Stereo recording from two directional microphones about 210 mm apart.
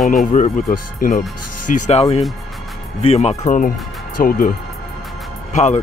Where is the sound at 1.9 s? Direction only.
30° left (ahead or behind).